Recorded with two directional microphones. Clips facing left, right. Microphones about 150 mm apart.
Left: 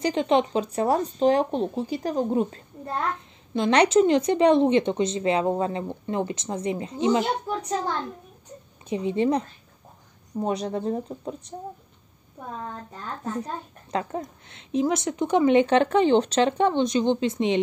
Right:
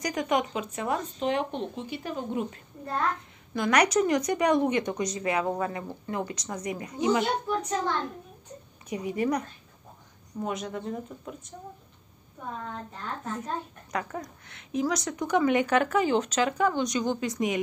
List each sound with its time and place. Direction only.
0.0 s speech: 25° left (ahead or behind)
3.2 s a woman's voice: 25° left (ahead or behind)
8.8 s a woman's voice: 25° left (ahead or behind)
10.4 s speech: 35° left (ahead or behind)
13.2 s a woman's voice: 30° left (ahead or behind)